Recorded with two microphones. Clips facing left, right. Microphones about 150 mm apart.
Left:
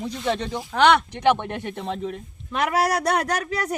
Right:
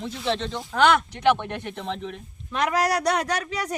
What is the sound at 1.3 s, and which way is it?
Speech, 15° left (ahead or behind).